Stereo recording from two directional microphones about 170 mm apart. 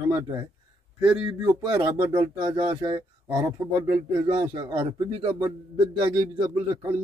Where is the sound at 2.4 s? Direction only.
30° right (ahead or behind).